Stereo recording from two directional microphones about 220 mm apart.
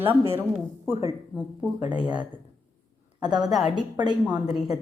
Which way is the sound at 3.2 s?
20° right (ahead or behind).